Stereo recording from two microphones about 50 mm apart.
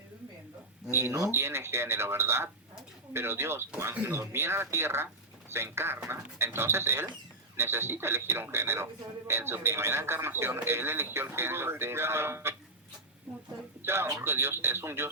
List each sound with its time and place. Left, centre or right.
0.9 s speech: right
1.3 s speech: right
13.8 s speech: right